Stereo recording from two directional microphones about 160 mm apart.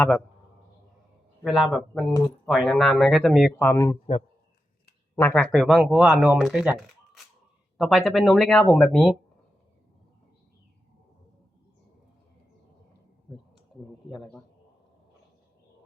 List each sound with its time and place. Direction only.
1.5 s speech: centre (ahead or behind)
3.5 s speech: 15° left (ahead or behind)
5.1 s speech: 10° left (ahead or behind)